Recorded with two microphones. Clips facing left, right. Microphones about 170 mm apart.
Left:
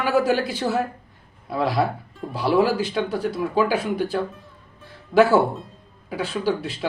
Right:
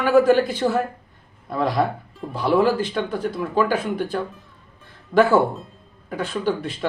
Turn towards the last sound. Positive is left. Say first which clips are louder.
# even
turn(degrees=5)  # may be behind; listen again after turning